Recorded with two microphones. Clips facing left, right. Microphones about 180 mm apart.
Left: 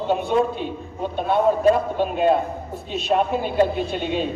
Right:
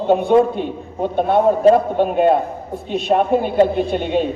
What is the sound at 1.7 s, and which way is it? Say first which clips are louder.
A man's voice: right 6 dB; 55° right (ahead or behind).